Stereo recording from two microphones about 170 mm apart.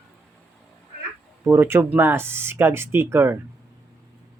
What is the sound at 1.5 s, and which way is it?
Speech, 15° right (ahead or behind).